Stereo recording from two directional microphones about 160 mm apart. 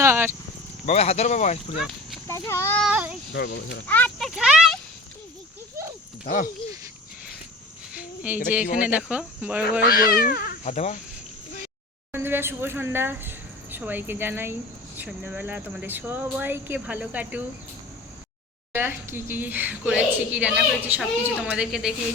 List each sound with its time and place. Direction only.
0.0 s a sound: 15° right (ahead or behind)
0.9 s speech: 40° left (ahead or behind)
2.2 s speech: 15° left (ahead or behind)
2.8 s speech: 10° right (ahead or behind)
3.3 s speech: 90° left
3.8 s speech: 10° left (ahead or behind)
4.4 s speech: 5° right (ahead or behind)
6.2 s speech: 55° left (ahead or behind)
8.3 s speech: 10° right (ahead or behind)
9.8 s speech: 65° left (ahead or behind); by 11.0 s 45° left (ahead or behind)
12.1 s speech: 15° right (ahead or behind)
18.7 s a woman's voice: 15° right (ahead or behind)